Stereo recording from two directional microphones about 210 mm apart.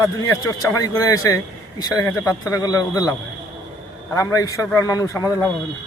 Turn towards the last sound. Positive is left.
turn(degrees=15)  # may be behind; listen again after turning